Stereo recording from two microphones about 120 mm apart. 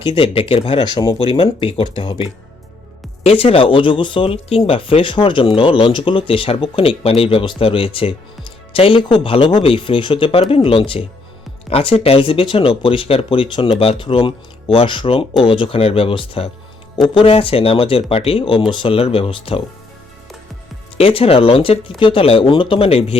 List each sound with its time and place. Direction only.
0.0 s speech: 45° left (ahead or behind)
3.2 s speech: 55° left (ahead or behind)
21.0 s speech: 50° left (ahead or behind)